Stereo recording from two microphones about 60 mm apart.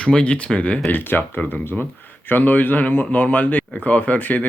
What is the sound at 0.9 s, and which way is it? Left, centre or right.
Speech, left.